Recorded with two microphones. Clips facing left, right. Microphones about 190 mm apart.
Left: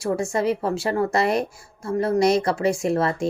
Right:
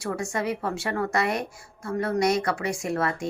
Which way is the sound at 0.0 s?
25° left (ahead or behind).